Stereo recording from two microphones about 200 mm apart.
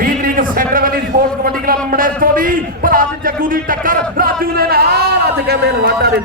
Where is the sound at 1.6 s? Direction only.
45° right (ahead or behind).